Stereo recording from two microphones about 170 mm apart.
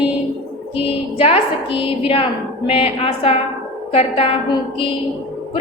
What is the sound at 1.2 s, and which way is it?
A woman's voice, 35° left (ahead or behind).